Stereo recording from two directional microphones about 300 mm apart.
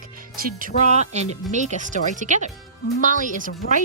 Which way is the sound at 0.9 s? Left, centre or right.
Right.